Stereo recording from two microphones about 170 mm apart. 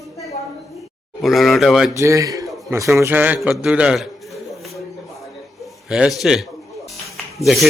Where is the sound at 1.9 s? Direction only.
20° right (ahead or behind).